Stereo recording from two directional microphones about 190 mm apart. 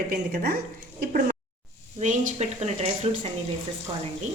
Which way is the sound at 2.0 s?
40° right (ahead or behind).